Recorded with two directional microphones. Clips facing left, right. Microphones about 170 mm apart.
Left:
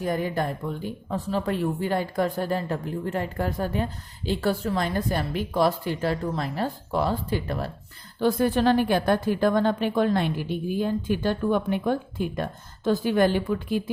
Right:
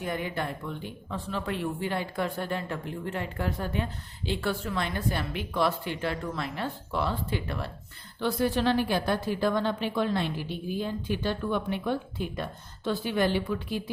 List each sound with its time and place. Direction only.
0.0 s a woman's voice: 40° left (ahead or behind)